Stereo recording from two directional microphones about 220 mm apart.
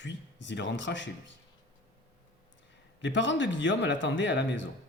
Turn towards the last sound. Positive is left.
turn(degrees=55)  # may be behind; listen again after turning